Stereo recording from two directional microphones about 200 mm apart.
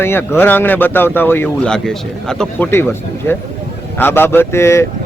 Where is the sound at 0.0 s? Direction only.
10° left (ahead or behind).